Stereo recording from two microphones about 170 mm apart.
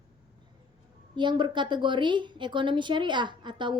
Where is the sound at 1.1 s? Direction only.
25° right (ahead or behind).